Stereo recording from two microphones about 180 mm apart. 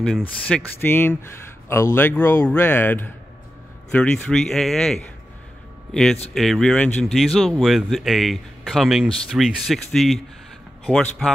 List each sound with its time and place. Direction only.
0.0 s a man's voice: 5° left (ahead or behind)
6.3 s a man's voice: centre (ahead or behind)